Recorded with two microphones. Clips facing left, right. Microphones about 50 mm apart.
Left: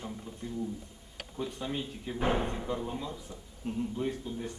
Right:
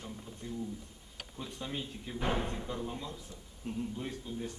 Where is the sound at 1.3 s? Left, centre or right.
Centre.